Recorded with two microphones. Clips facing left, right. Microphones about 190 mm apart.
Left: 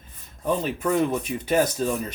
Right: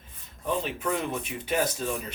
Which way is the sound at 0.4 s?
40° left (ahead or behind).